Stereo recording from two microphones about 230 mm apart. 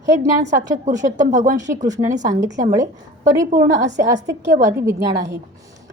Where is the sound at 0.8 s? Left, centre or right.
Right.